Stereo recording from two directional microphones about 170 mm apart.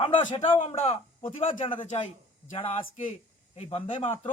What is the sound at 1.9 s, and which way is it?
Speech, 45° left (ahead or behind).